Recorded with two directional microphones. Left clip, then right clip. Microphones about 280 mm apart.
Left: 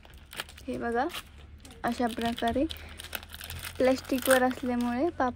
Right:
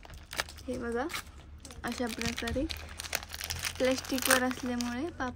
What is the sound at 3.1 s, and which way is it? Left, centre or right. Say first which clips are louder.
Crumpling: right 4 dB; right.